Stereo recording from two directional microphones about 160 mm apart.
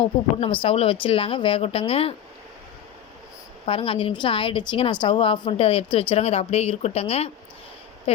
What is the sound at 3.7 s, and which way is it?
Speech, 35° left (ahead or behind).